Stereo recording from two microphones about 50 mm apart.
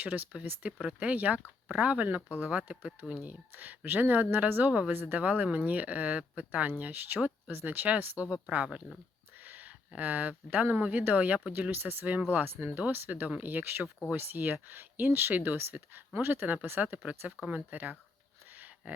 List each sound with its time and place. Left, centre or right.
0.0 s speech: right
0.8 s speech: right
8.2 s speech: centre
9.4 s a sound: right
10.0 s speech: right
16.8 s speech: right
18.5 s a sound: right